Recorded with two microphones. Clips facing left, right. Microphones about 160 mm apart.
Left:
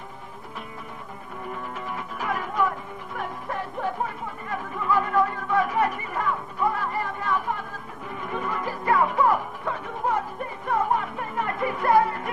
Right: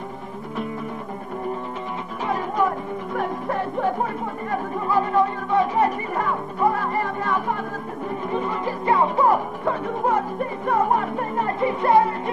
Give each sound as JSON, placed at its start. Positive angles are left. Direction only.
{"t": 2.2, "sound": "music", "side_deg": -30}
{"t": 3.2, "sound": "music", "side_deg": -50}
{"t": 8.3, "sound": "music", "side_deg": -25}